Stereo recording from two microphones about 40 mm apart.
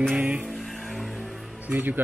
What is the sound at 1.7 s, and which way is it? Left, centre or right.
Speech, right.